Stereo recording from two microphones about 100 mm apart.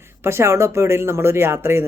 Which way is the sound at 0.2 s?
25° right (ahead or behind).